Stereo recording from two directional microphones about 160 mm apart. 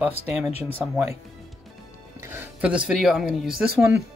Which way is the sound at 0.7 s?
10° right (ahead or behind).